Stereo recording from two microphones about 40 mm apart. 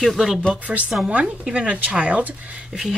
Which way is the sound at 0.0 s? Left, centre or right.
Centre.